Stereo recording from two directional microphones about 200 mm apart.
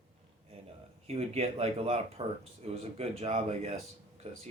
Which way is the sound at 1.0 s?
30° right (ahead or behind).